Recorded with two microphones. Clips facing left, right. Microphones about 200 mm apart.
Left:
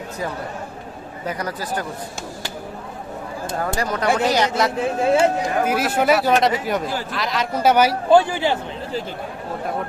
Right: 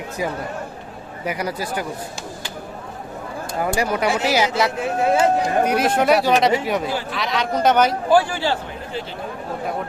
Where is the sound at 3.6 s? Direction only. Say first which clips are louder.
Right 3 dB; 10° right (ahead or behind); by 7.9 s 10° left (ahead or behind).